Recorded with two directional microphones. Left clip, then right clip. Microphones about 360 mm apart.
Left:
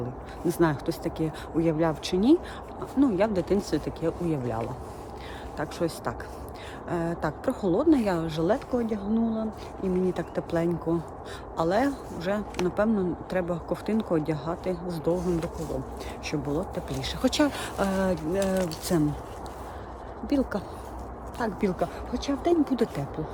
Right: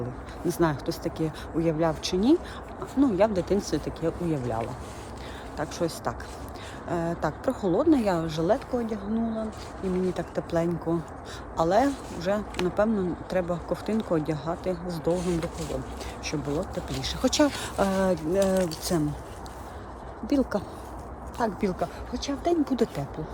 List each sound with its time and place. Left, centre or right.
0.4 s a woman's voice: centre
20.2 s a woman's voice: centre